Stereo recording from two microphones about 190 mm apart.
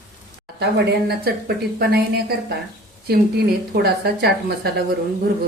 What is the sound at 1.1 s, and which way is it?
Speech, 55° right (ahead or behind).